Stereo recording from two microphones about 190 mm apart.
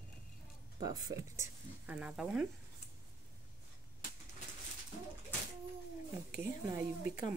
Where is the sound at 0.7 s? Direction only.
20° right (ahead or behind); by 2.4 s 5° right (ahead or behind).